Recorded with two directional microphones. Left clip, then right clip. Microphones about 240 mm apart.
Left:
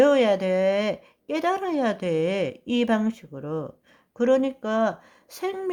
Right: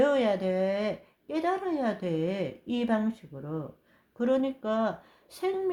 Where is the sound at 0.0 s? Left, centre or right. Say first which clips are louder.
Left 6 dB; left.